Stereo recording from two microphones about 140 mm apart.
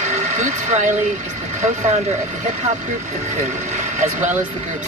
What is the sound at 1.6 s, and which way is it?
Speech, 55° right (ahead or behind).